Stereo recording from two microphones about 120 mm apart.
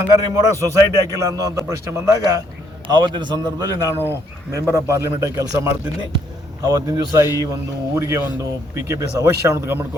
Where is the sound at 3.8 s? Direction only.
20° left (ahead or behind).